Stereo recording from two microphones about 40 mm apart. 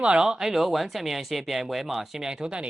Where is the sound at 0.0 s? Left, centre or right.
Right.